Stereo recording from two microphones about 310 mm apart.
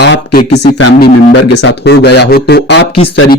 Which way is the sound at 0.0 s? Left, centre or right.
Left.